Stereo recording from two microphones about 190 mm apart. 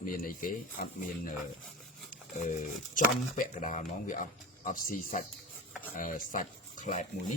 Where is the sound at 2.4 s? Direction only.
40° left (ahead or behind).